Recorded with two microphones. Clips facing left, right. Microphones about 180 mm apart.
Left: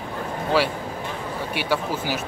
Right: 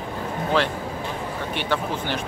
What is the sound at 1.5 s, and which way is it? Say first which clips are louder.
Speech: left 1 dB; 10° left (ahead or behind).